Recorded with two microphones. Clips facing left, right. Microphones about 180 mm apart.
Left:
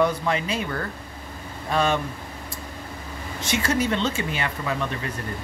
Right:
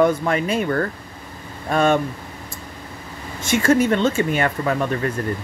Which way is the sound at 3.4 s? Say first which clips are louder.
Right 7 dB; 50° right (ahead or behind).